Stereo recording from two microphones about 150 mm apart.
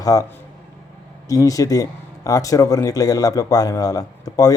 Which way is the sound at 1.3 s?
25° left (ahead or behind).